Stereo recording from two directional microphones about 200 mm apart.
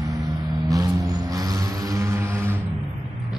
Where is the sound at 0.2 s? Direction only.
Centre (ahead or behind).